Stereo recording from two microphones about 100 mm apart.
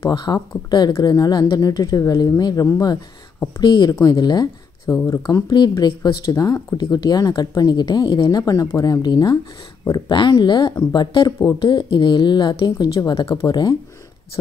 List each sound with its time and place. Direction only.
0.1 s speech: 45° left (ahead or behind)